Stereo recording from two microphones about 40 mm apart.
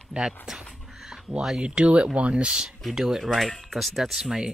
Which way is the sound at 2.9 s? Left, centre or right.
Centre.